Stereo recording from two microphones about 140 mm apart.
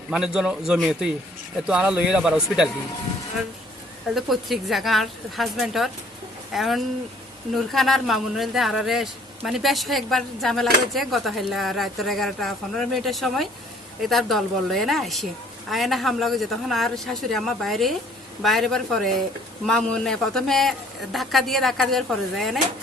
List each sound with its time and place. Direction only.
0.1 s speech: 5° right (ahead or behind)
4.1 s speech: centre (ahead or behind)